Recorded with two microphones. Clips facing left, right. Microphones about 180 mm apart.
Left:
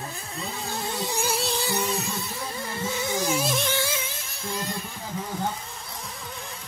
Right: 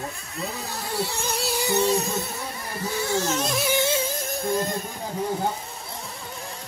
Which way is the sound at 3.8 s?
25° right (ahead or behind).